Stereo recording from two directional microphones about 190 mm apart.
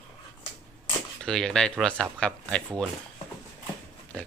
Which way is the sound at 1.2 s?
5° left (ahead or behind).